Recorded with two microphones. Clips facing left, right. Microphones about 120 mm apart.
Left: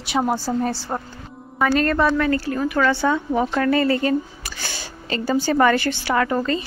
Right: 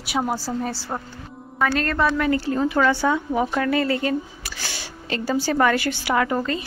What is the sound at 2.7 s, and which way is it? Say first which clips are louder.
Speech: left 2 dB; 10° right (ahead or behind).